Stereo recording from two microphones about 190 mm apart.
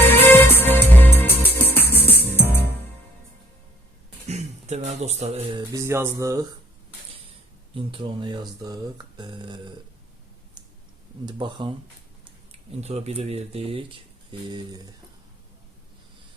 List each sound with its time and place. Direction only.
0.0 s music: 10° left (ahead or behind)
4.3 s speech: 35° right (ahead or behind)
5.7 s music: 15° right (ahead or behind)
7.7 s speech: 25° right (ahead or behind)
11.3 s speech: 25° right (ahead or behind)